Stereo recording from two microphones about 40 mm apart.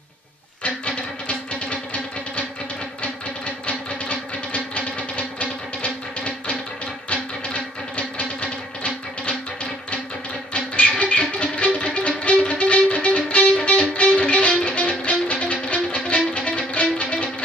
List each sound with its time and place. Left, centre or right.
0.7 s music: left
3.6 s music: left
10.5 s music: left